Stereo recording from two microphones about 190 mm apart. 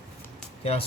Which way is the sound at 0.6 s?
35° left (ahead or behind).